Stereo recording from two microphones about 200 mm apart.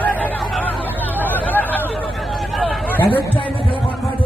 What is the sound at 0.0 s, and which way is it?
Chatter, 10° left (ahead or behind).